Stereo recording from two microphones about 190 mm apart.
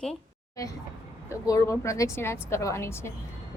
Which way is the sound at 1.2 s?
15° left (ahead or behind).